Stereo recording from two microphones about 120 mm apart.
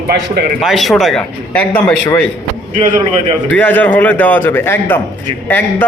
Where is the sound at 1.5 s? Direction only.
15° left (ahead or behind).